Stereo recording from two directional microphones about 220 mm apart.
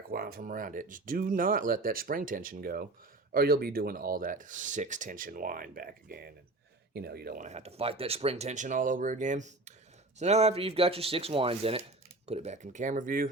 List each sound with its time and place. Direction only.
0.1 s speech: 40° right (ahead or behind)